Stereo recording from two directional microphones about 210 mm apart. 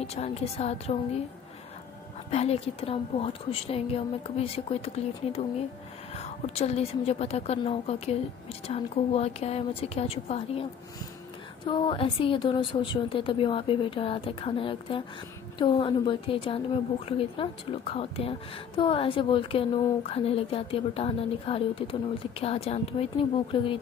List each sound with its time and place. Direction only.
0.0 s a woman's voice: 30° left (ahead or behind)
2.3 s a woman's voice: 30° left (ahead or behind)